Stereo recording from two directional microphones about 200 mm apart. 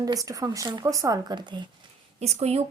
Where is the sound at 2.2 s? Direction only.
30° right (ahead or behind).